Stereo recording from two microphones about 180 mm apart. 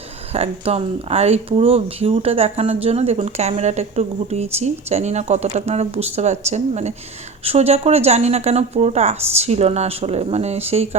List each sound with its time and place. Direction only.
0.3 s speech: 35° right (ahead or behind)